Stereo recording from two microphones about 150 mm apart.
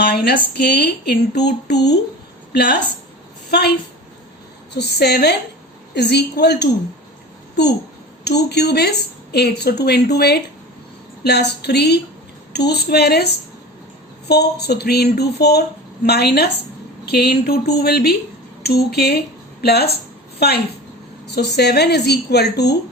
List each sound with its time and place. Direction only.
0.0 s a woman's voice: 90° left
4.7 s a woman's voice: 90° left
8.2 s a woman's voice: 90° left